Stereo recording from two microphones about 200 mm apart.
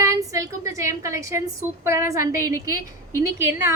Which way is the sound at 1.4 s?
15° right (ahead or behind).